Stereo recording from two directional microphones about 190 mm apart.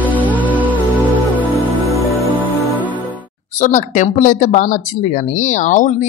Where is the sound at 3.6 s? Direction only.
40° left (ahead or behind).